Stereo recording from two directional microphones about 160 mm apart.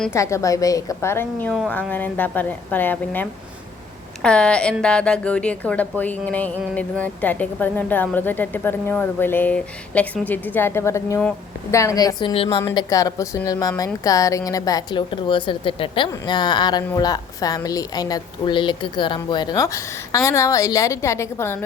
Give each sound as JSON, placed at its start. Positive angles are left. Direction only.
{"t": 0.1, "sound": "a woman's voice", "side_deg": 20}
{"t": 12.7, "sound": "a woman's voice", "side_deg": 20}